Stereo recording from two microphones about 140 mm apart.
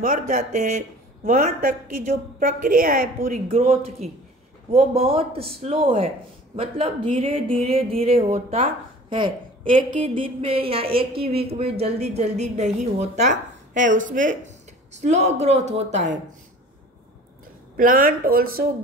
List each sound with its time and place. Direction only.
0.0 s speech: 75° right (ahead or behind)
3.4 s speech: 45° right (ahead or behind)
9.8 s speech: 40° right (ahead or behind); by 14.5 s 70° right (ahead or behind)
15.0 s speech: 55° right (ahead or behind)
17.7 s speech: 75° right (ahead or behind); by 18.7 s 90° right